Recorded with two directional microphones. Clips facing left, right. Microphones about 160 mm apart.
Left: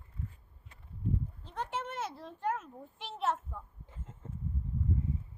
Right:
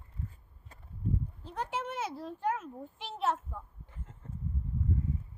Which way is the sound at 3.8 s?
20° left (ahead or behind).